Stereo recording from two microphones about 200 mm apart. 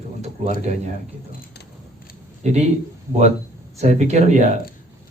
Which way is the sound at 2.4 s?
35° right (ahead or behind).